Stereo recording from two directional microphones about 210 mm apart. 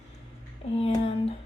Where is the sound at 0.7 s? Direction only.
30° left (ahead or behind).